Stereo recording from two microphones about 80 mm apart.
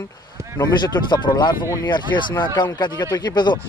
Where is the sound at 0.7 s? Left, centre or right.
Left.